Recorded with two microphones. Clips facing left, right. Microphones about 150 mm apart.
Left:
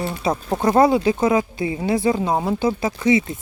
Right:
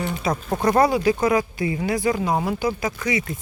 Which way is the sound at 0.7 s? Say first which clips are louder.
Left 3 dB; 20° left (ahead or behind).